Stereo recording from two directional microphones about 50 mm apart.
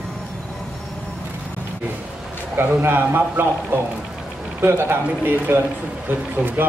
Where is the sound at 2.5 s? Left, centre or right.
Right.